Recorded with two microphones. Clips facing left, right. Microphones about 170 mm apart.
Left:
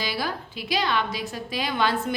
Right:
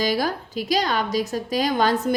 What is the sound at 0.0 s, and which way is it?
A woman's voice, 45° right (ahead or behind).